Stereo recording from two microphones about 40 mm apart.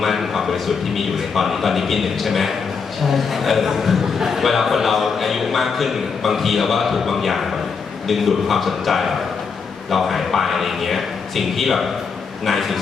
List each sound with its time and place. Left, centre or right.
0.0 s a man's voice: centre